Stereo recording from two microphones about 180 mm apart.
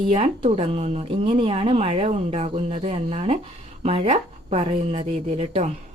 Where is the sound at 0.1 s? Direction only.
30° right (ahead or behind).